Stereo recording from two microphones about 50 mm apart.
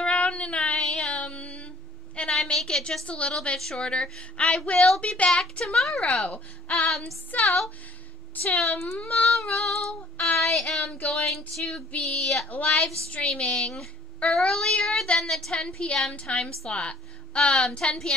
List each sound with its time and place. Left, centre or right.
0.0 s music: left
2.1 s a sound: left
2.7 s a woman's voice: centre
3.1 s a woman's voice: left
5.3 s a woman's voice: centre
6.2 s speech: left
7.4 s a woman's voice: centre
8.4 s speech: left
9.4 s a woman's voice: centre
10.2 s child singing: centre
12.4 s speech: left
13.2 s a woman's voice: centre
15.5 s a woman's voice: centre